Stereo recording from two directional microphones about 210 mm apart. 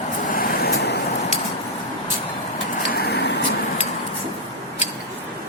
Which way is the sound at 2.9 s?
50° left (ahead or behind).